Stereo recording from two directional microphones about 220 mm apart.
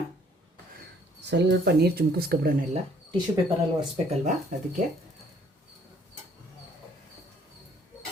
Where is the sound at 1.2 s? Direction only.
50° right (ahead or behind).